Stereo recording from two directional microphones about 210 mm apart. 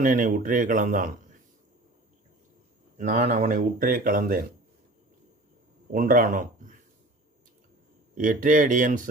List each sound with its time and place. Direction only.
0.0 s speech: 40° right (ahead or behind)
3.0 s speech: 35° right (ahead or behind)
5.9 s speech: 40° right (ahead or behind)
8.1 s speech: 40° right (ahead or behind)